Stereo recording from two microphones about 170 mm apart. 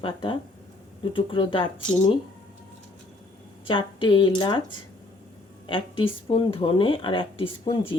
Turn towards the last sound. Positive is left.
turn(degrees=30)  # may be behind; listen again after turning